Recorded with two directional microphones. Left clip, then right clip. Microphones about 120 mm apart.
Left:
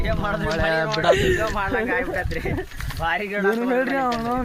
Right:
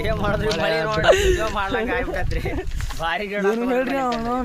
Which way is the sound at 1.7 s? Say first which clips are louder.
Even; 15° right (ahead or behind).